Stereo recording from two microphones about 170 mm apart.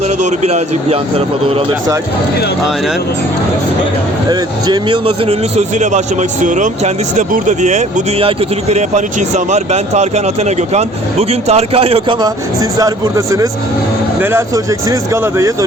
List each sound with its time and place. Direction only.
0.2 s speech: 45° right (ahead or behind)
4.3 s speech: 25° right (ahead or behind)
12.2 s speech: 20° right (ahead or behind)